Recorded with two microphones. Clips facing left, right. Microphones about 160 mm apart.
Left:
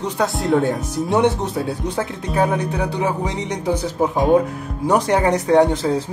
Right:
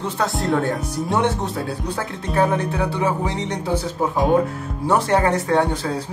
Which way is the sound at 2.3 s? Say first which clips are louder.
Even; 15° left (ahead or behind).